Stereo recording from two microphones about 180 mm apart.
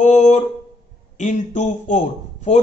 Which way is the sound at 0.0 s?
40° left (ahead or behind).